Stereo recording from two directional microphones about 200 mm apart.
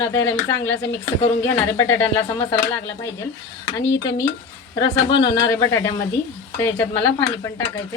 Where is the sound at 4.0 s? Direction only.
20° left (ahead or behind).